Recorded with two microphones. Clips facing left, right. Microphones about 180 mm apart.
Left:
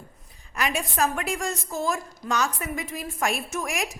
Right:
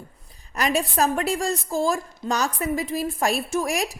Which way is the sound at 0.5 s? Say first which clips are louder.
Right 5 dB; 35° right (ahead or behind).